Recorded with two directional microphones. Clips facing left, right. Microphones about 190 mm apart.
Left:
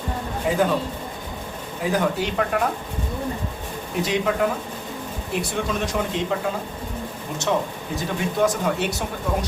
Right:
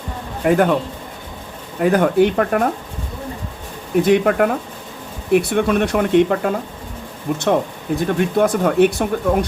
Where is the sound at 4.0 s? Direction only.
60° right (ahead or behind).